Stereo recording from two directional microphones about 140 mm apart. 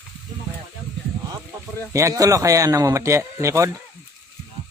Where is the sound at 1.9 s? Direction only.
20° right (ahead or behind).